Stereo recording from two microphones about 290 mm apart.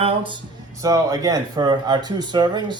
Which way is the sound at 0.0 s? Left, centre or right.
Centre.